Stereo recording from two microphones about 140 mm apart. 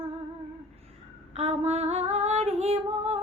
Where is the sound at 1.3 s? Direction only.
50° right (ahead or behind).